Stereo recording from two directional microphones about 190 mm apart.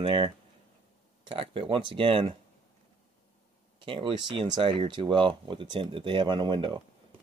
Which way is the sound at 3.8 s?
25° right (ahead or behind).